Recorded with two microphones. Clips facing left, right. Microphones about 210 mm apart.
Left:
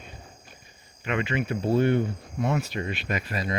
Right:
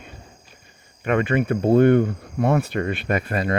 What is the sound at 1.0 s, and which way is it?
Speech, 55° right (ahead or behind).